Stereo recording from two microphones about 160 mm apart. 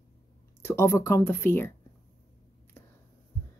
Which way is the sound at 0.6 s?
15° left (ahead or behind).